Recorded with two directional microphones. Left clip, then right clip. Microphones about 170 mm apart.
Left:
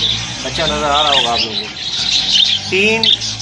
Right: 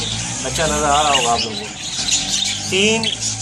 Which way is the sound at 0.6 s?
Centre (ahead or behind).